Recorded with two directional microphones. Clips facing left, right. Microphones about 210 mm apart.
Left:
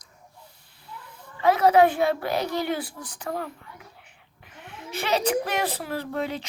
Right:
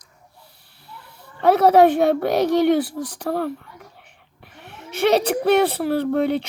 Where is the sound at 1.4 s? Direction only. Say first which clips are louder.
Right 5 dB; 65° right (ahead or behind).